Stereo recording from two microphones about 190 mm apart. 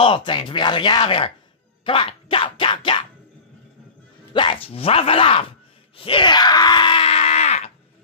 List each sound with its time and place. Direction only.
0.0 s speech: 25° left (ahead or behind)
1.9 s a sound: 25° left (ahead or behind)
4.3 s speech: 25° left (ahead or behind)
5.9 s groan: 25° left (ahead or behind)